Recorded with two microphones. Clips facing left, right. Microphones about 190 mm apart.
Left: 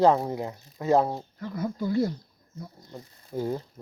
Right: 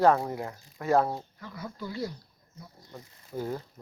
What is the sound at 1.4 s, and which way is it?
Speech, 45° left (ahead or behind).